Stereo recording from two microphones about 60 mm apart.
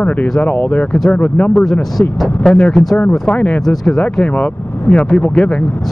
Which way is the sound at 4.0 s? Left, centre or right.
Left.